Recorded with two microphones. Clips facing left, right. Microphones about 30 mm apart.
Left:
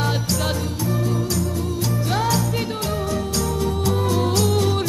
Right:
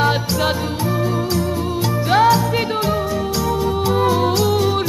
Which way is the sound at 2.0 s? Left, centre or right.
Right.